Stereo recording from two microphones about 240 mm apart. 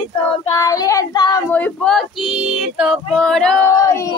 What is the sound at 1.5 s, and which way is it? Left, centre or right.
Speech, centre.